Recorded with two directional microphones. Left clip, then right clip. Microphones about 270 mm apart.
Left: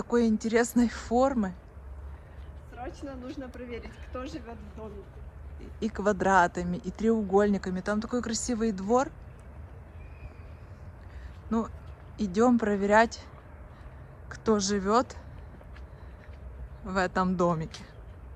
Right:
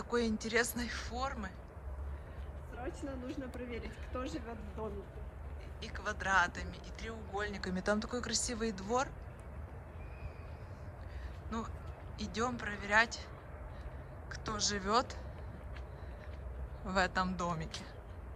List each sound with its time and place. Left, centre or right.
0.0 s speech: centre
2.7 s speech: centre
11.5 s speech: centre
14.3 s speech: centre
16.8 s speech: centre